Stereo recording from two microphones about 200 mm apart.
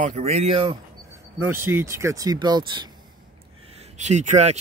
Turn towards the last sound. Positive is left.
turn(degrees=-35)  # may be behind; listen again after turning